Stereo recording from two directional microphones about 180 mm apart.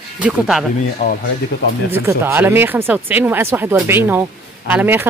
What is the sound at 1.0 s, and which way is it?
Speech, 50° left (ahead or behind).